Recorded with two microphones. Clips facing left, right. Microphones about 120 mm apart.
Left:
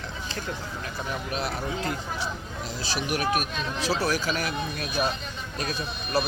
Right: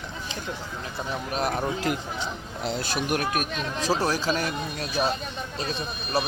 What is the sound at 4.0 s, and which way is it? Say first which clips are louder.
Speech: right 2 dB; 35° right (ahead or behind).